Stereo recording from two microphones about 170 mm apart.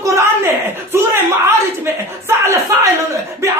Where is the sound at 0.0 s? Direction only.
15° right (ahead or behind).